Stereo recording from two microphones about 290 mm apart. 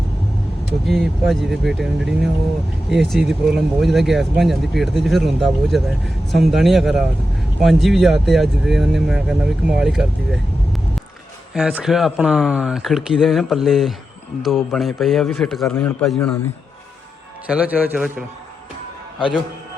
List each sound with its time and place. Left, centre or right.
0.9 s speech: centre
17.5 s speech: centre